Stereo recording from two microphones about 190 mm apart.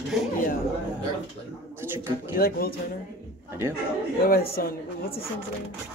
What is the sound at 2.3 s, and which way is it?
Speech, 50° left (ahead or behind).